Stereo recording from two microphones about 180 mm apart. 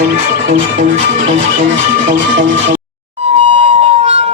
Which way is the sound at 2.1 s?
90° right.